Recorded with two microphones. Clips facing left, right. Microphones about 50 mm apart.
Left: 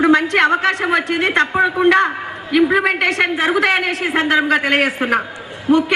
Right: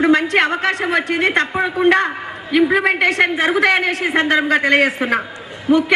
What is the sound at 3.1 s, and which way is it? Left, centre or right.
A man's voice, centre.